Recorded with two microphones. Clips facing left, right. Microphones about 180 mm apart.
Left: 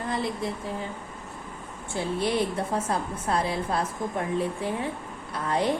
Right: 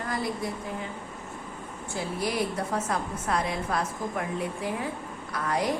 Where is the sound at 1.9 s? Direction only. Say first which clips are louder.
Left 4 dB; 25° left (ahead or behind).